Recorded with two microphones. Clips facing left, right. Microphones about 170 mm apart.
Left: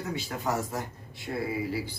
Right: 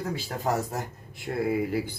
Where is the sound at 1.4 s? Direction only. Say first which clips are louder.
Right 6 dB; 55° right (ahead or behind).